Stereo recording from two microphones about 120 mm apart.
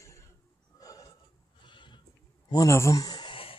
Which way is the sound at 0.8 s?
30° left (ahead or behind).